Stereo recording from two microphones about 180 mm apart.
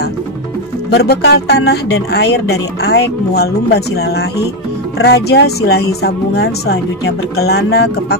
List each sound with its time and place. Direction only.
0.8 s speech: 65° left (ahead or behind)